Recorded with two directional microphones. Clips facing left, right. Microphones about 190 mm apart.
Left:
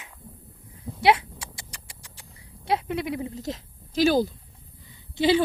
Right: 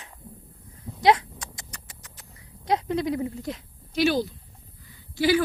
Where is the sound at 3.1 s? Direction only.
20° left (ahead or behind).